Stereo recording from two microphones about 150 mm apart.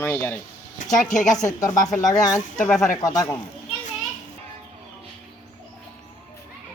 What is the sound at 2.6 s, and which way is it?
Speech, 5° left (ahead or behind).